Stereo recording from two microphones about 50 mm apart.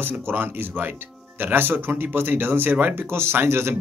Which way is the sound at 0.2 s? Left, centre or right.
Right.